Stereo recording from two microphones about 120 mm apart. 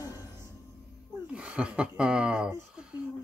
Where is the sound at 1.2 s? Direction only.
10° right (ahead or behind).